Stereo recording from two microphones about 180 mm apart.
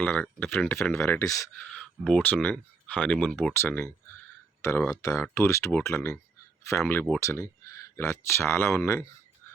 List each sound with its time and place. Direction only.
0.0 s speech: 10° left (ahead or behind)
1.5 s speech: 5° left (ahead or behind)
4.9 s speech: 20° left (ahead or behind)